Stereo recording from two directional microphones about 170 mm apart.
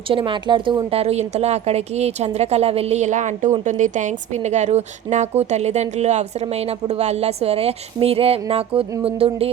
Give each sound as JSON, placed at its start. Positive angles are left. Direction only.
{"t": 0.1, "sound": "a woman's voice", "side_deg": -30}